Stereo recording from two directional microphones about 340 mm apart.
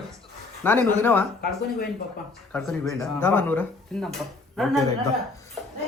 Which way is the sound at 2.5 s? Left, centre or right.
Centre.